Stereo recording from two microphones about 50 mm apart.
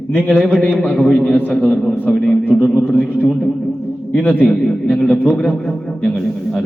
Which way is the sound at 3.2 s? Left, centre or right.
Centre.